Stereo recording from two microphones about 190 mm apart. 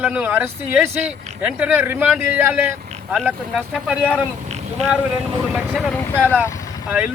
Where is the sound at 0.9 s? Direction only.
35° right (ahead or behind).